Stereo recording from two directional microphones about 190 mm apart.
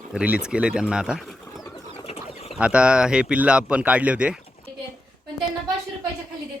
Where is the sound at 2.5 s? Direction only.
5° right (ahead or behind).